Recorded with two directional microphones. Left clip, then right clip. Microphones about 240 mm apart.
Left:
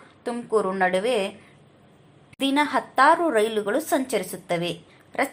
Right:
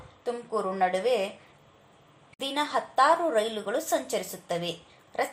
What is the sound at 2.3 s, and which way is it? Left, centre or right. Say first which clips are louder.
A woman's voice: left 6 dB; centre.